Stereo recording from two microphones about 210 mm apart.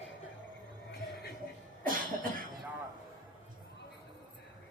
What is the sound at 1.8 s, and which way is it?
Cough, 40° right (ahead or behind).